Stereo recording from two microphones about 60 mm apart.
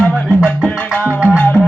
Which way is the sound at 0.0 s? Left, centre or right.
Centre.